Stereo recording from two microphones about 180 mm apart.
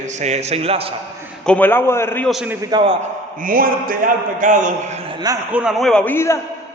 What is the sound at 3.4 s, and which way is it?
A man's voice, 50° right (ahead or behind).